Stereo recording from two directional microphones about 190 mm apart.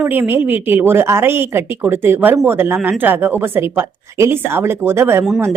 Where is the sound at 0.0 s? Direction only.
10° right (ahead or behind).